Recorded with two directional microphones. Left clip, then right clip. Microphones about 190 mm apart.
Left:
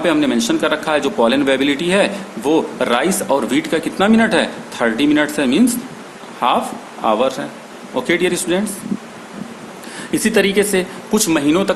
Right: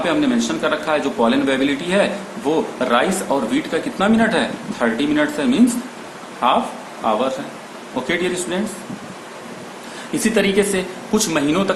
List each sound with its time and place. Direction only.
0.0 s a man's voice: 55° left (ahead or behind)
10.2 s speech: 50° left (ahead or behind)